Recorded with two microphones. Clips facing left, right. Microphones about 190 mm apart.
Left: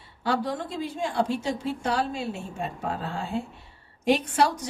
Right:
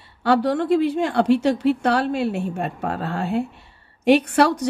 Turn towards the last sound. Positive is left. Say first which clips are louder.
# right 6 dB
turn(degrees=-65)  # may be behind; listen again after turning